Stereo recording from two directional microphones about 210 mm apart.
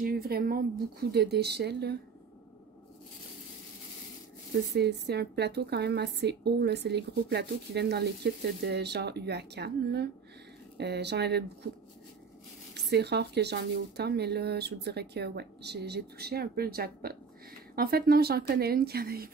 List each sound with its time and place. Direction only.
0.0 s a woman's voice: 45° right (ahead or behind)
4.7 s a woman's voice: 50° right (ahead or behind)
12.9 s a woman's voice: 50° right (ahead or behind)